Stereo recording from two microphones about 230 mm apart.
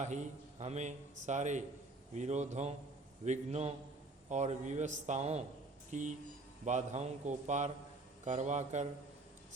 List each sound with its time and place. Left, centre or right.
0.6 s a man's voice: right